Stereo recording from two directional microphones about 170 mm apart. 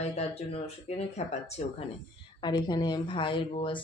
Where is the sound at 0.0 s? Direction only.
40° left (ahead or behind).